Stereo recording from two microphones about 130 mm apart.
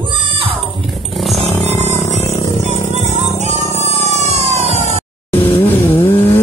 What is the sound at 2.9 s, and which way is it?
Music, 60° right (ahead or behind).